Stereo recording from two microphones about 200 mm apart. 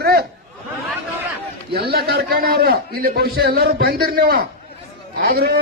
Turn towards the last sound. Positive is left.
turn(degrees=-50)  # may be behind; listen again after turning